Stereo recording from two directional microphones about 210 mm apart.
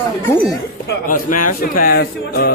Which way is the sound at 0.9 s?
40° left (ahead or behind).